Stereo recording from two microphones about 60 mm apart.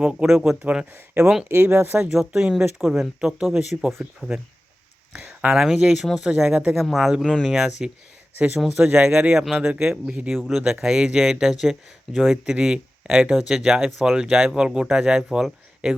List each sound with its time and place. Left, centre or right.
0.0 s speech: centre
1.7 s speech: right
2.1 s speech: centre
5.2 s a sound: right
5.5 s speech: centre
6.7 s speech: centre
8.8 s speech: right
9.0 s speech: centre
10.3 s speech: centre